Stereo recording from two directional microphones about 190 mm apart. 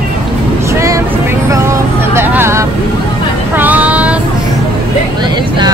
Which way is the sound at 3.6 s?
10° right (ahead or behind).